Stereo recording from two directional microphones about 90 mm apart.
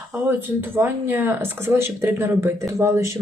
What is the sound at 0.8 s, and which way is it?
Speech, 20° right (ahead or behind).